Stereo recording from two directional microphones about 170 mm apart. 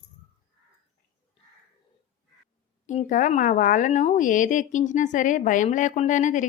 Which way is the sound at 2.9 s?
45° left (ahead or behind).